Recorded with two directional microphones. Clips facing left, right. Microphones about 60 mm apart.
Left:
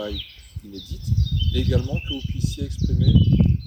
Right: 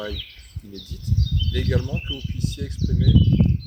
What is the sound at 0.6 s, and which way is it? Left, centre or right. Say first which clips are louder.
Speech: even; right.